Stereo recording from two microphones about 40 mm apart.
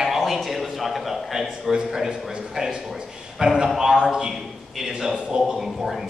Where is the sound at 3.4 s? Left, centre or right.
Centre.